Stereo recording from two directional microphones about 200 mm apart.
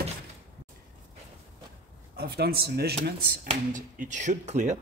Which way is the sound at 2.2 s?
50° right (ahead or behind).